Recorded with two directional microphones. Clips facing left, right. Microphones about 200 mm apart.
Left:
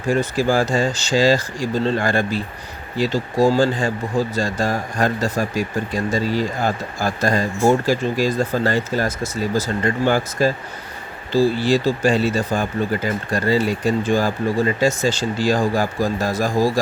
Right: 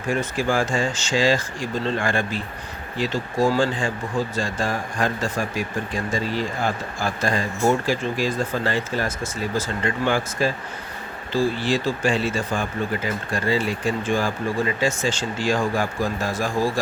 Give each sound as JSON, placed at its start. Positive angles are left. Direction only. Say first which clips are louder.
{"t": 0.1, "sound": "speech", "louder": "left 4 dB", "side_deg": 35}